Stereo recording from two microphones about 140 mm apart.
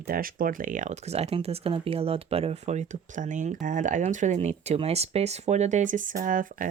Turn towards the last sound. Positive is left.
turn(degrees=-75)  # may be behind; listen again after turning